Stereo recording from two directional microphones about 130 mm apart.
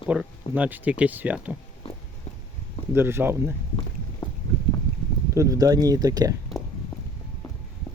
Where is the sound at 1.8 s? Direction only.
45° left (ahead or behind).